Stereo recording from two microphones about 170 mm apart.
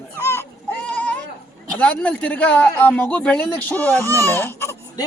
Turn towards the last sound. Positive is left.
turn(degrees=15)  # may be behind; listen again after turning